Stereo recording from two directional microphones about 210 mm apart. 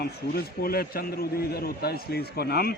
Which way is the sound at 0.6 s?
45° left (ahead or behind).